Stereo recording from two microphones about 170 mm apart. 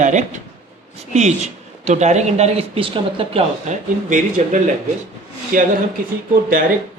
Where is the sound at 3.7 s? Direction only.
45° right (ahead or behind).